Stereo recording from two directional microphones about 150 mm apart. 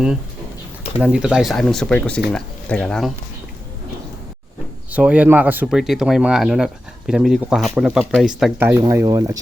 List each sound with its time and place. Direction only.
1.0 s speech: 5° right (ahead or behind)
4.9 s speech: 10° right (ahead or behind)
8.5 s speech: 15° right (ahead or behind)